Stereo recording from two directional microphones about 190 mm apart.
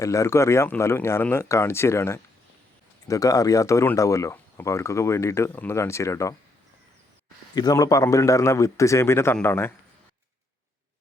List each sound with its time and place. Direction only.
0.0 s speech: 15° left (ahead or behind)
7.5 s speech: 20° left (ahead or behind)